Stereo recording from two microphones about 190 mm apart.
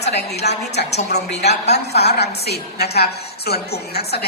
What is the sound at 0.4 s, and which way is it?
A woman's voice, 60° left (ahead or behind).